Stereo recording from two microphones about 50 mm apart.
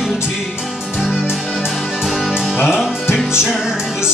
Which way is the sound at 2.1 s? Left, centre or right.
Centre.